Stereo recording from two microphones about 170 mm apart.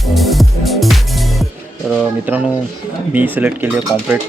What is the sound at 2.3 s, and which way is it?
Speech, 10° right (ahead or behind).